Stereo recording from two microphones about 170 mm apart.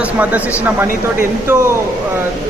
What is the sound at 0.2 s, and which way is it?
Speech, 10° right (ahead or behind).